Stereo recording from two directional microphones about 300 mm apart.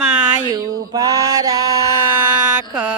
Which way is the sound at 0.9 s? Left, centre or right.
Centre.